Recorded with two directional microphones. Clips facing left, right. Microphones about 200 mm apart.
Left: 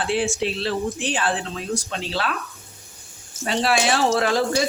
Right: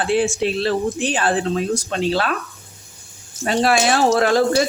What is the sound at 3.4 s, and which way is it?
Speech, 50° right (ahead or behind).